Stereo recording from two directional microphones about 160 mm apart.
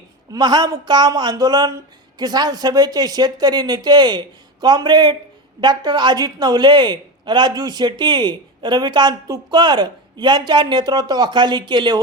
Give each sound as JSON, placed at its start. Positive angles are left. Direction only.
{"t": 0.3, "sound": "a woman's voice", "side_deg": -25}